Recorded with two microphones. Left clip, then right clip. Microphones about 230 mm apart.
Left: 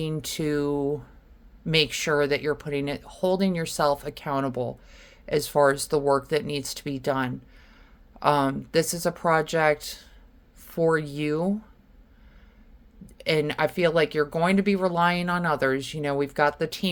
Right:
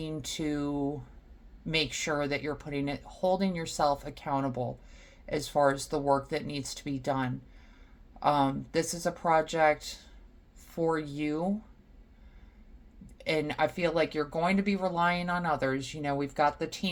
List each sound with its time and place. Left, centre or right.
0.0 s speech: left
13.1 s speech: left